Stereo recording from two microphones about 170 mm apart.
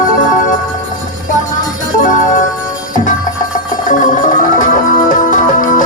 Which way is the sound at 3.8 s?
50° left (ahead or behind).